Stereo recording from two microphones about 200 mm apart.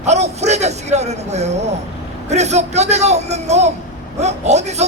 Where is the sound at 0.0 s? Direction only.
35° right (ahead or behind).